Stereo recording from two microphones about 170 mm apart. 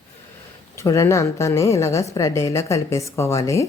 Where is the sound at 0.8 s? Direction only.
15° left (ahead or behind).